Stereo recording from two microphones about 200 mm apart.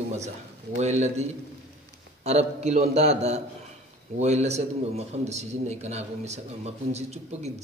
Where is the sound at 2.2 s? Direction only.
35° right (ahead or behind).